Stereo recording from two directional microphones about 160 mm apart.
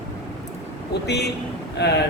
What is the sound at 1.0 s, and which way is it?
Speech, 90° left.